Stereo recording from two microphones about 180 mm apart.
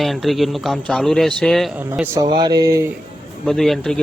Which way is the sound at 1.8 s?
15° right (ahead or behind).